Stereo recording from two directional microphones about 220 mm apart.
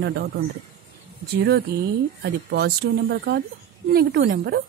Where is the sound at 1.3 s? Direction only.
45° right (ahead or behind).